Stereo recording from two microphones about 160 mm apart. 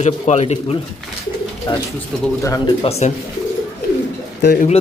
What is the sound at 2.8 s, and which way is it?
Speech, 40° left (ahead or behind).